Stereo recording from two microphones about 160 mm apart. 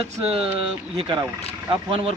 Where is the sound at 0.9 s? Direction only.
35° right (ahead or behind).